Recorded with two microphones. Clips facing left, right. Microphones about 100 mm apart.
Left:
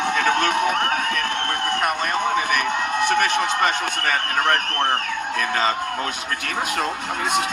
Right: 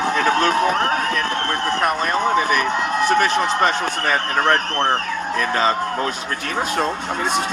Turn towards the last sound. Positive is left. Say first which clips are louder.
# right 3 dB
turn(degrees=-30)  # may be behind; listen again after turning